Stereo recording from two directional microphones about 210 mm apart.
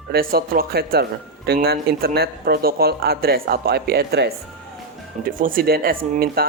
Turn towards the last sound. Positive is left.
turn(degrees=-45)  # may be behind; listen again after turning